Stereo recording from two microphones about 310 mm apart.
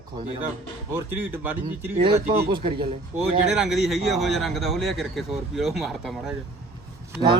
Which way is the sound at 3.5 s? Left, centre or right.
Centre.